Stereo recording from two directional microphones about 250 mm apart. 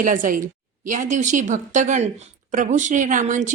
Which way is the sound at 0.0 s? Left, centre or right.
Right.